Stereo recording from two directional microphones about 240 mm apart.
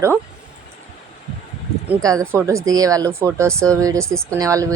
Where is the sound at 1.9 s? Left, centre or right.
Centre.